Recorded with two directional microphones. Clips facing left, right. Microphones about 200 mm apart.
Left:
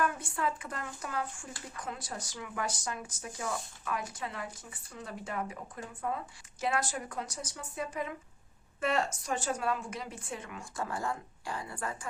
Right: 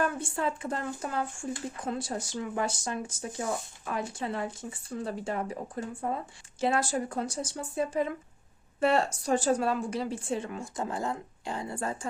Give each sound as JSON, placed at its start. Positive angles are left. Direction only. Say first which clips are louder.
{"t": 0.0, "sound": "speech", "louder": "right 3 dB", "side_deg": -25}